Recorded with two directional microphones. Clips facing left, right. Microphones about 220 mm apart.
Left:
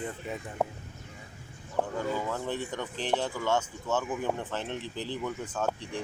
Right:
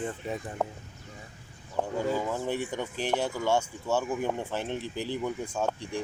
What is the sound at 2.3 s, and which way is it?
Speech, 10° right (ahead or behind).